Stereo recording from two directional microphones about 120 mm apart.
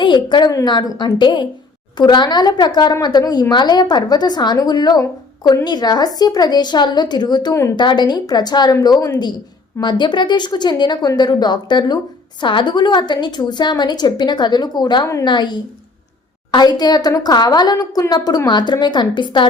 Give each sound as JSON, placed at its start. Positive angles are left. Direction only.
{"t": 0.0, "sound": "a woman's voice", "side_deg": 40}